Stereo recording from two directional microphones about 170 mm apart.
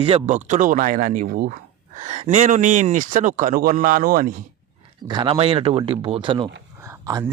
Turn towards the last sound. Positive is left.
turn(degrees=-20)  # may be behind; listen again after turning